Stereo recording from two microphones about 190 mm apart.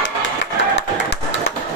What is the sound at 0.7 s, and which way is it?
Music, 70° left (ahead or behind).